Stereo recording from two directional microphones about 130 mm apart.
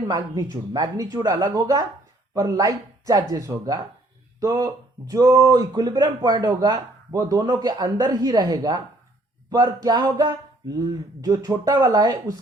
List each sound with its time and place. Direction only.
0.1 s speech: 25° right (ahead or behind)